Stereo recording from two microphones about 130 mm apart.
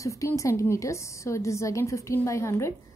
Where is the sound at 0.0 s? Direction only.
25° left (ahead or behind).